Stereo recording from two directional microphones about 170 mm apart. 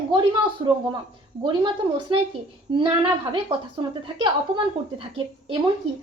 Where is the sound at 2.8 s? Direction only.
30° right (ahead or behind).